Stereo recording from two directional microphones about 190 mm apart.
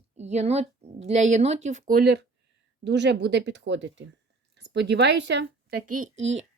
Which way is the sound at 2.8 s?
65° right (ahead or behind).